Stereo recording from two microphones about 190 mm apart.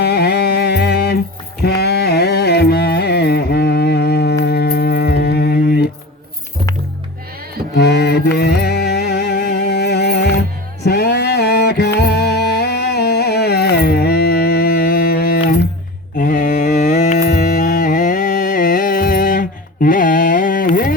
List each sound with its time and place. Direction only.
0.0 s music: 55° left (ahead or behind)
1.6 s carnatic music: 55° left (ahead or behind)
4.4 s music: 60° left (ahead or behind)
7.8 s music: 60° left (ahead or behind)
10.8 s a sound: 60° left (ahead or behind)
11.9 s music: 60° left (ahead or behind)
16.1 s mantra: 45° left (ahead or behind)
17.4 s music: 40° left (ahead or behind)